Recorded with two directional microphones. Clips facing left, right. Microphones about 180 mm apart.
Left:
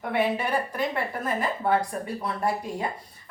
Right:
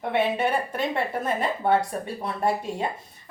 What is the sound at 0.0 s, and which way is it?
Speech, 25° right (ahead or behind).